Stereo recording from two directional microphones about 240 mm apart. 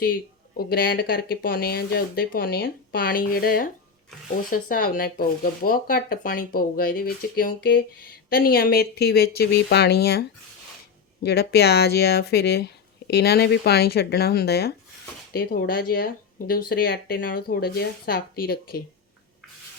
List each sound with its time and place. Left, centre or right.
0.0 s speech: left